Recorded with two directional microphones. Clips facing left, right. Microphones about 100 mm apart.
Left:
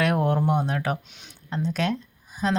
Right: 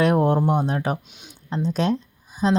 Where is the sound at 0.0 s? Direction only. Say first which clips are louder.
Right 4 dB; 30° right (ahead or behind).